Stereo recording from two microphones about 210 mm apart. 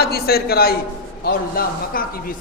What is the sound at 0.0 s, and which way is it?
A man's voice, 45° left (ahead or behind).